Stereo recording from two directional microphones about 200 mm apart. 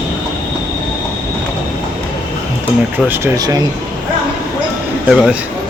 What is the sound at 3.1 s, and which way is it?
Speech, 20° right (ahead or behind).